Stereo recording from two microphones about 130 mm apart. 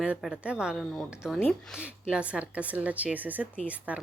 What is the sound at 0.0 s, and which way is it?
Speech, 5° right (ahead or behind).